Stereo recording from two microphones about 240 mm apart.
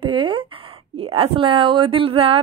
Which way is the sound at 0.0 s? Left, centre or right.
Right.